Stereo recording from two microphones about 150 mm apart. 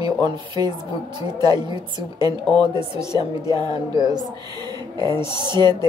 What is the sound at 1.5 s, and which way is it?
A woman's voice, 30° right (ahead or behind).